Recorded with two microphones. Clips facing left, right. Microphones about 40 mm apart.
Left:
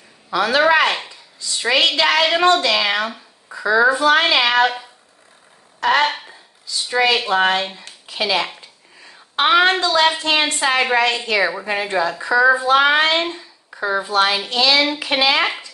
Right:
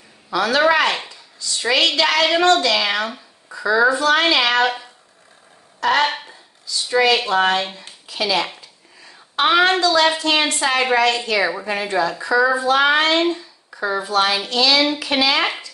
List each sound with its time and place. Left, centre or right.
0.3 s a woman's voice: left
2.2 s a woman's voice: centre
5.8 s a sound: left
6.0 s a sound: centre
6.9 s a woman's voice: left
8.1 s a woman's voice: left
11.8 s a woman's voice: left